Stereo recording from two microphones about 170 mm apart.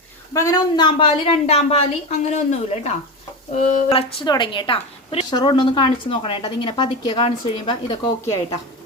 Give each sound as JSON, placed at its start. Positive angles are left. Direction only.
{"t": 0.3, "sound": "a woman's voice", "side_deg": 20}
{"t": 4.2, "sound": "a woman's voice", "side_deg": 25}